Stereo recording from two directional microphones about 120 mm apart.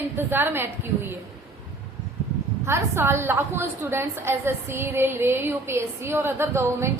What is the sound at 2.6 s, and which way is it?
A woman's voice, 20° right (ahead or behind).